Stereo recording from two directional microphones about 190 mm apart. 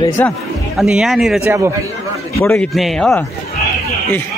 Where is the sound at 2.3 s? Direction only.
15° left (ahead or behind).